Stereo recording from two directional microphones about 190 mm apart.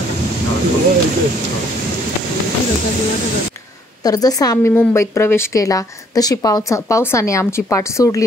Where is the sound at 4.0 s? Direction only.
20° left (ahead or behind).